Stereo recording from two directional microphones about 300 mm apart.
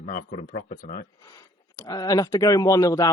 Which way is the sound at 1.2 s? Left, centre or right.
Centre.